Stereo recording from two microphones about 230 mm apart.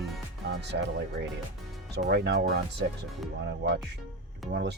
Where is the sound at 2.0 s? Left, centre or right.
Right.